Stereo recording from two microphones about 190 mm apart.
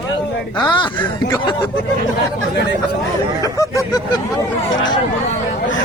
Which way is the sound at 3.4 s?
20° left (ahead or behind).